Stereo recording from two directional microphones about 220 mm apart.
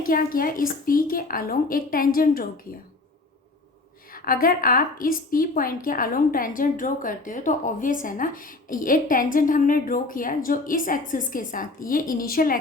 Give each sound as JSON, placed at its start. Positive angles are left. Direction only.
{"t": 0.0, "sound": "a woman's voice", "side_deg": 40}
{"t": 4.1, "sound": "a woman's voice", "side_deg": 40}